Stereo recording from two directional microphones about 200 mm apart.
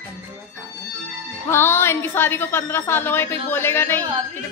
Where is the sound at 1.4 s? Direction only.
10° left (ahead or behind).